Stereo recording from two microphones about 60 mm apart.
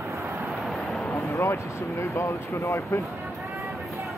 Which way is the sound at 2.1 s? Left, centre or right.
Left.